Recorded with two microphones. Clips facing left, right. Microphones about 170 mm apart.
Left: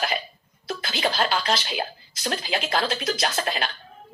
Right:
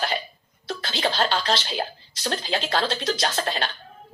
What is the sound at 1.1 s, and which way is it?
Speech, 30° right (ahead or behind).